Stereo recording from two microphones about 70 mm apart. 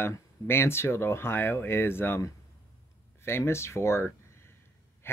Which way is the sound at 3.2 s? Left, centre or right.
Left.